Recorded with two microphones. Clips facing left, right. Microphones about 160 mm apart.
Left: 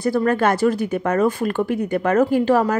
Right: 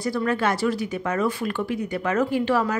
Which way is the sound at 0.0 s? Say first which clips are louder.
Left 5 dB; 50° left (ahead or behind).